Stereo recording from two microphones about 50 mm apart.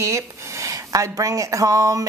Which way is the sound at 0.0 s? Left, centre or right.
Right.